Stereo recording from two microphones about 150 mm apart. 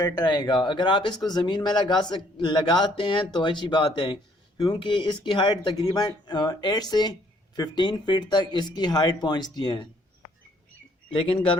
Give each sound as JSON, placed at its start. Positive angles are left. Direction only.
{"t": 0.0, "sound": "speech", "side_deg": 25}
{"t": 11.1, "sound": "speech", "side_deg": 35}